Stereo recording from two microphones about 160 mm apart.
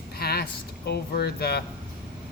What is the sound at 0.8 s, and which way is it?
Speech, 85° left.